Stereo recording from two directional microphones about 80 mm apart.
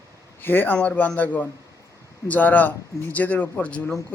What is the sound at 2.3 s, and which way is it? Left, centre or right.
Speech, left.